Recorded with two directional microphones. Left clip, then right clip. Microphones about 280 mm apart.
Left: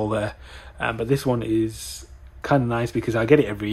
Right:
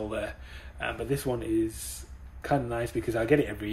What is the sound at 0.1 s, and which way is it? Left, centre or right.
Speech, centre.